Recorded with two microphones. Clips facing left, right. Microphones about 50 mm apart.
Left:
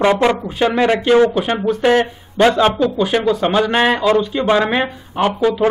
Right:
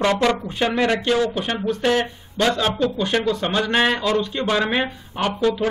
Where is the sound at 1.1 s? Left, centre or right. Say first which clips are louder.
Left 8 dB; left.